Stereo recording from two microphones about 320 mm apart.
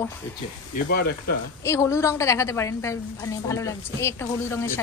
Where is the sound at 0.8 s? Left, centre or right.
Left.